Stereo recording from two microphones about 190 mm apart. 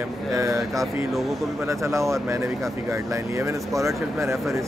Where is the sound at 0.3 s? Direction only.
15° right (ahead or behind).